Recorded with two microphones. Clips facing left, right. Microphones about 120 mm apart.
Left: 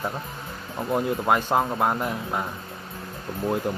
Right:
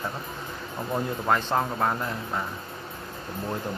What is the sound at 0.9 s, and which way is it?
Speech, 15° left (ahead or behind).